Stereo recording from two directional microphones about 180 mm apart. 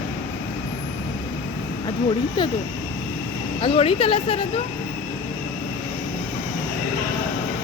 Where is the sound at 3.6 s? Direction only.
30° left (ahead or behind).